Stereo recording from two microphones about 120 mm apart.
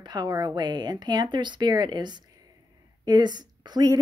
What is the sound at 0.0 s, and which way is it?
Speech, 35° right (ahead or behind).